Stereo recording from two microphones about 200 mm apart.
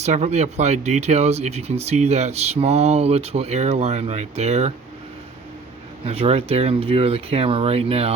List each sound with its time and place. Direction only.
0.0 s speech: 35° right (ahead or behind)
6.1 s speech: 30° right (ahead or behind)